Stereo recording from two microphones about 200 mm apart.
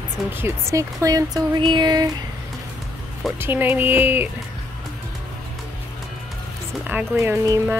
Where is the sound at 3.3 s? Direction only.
10° right (ahead or behind).